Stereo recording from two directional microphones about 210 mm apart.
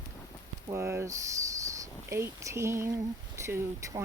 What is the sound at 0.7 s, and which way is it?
Speech, 10° right (ahead or behind).